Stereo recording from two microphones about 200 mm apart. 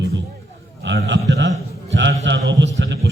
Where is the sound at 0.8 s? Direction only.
65° right (ahead or behind).